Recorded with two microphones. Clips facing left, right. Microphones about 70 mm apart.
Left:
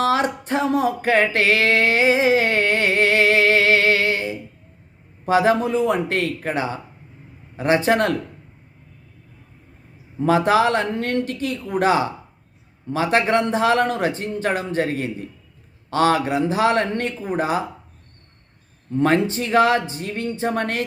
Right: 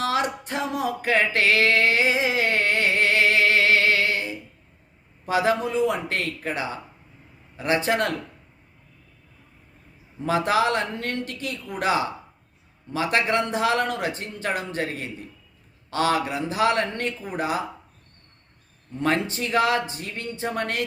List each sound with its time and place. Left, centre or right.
0.0 s a sound: left
5.2 s a man's voice: left
7.9 s a man's voice: left
10.2 s a man's voice: left
19.0 s a man's voice: left